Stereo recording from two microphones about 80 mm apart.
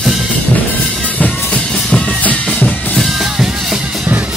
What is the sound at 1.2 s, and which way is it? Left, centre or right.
Music, centre.